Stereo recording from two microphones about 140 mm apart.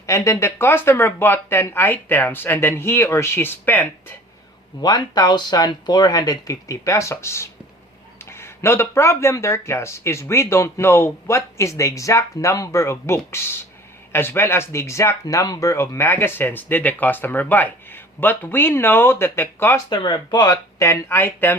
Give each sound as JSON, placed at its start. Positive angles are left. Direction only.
{"t": 0.0, "sound": "speech", "side_deg": 20}
{"t": 4.8, "sound": "speech", "side_deg": 30}
{"t": 19.9, "sound": "speech", "side_deg": 30}